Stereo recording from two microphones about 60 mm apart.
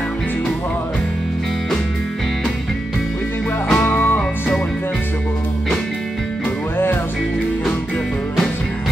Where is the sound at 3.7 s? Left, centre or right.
Left.